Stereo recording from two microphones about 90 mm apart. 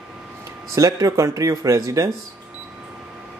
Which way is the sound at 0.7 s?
40° right (ahead or behind).